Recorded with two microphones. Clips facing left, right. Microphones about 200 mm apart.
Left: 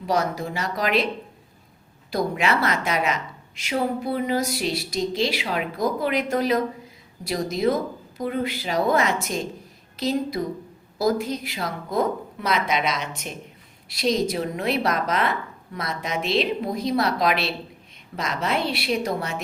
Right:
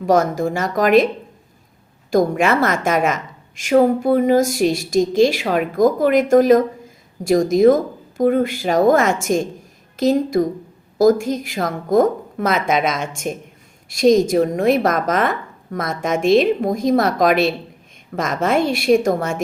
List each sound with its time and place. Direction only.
0.0 s a woman's voice: 45° right (ahead or behind)
2.0 s a woman's voice: 45° right (ahead or behind)